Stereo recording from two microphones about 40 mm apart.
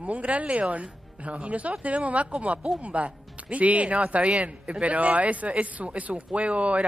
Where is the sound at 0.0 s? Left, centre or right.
Right.